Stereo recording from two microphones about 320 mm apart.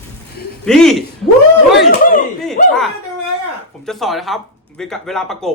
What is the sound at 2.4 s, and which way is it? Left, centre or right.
A man's voice, centre.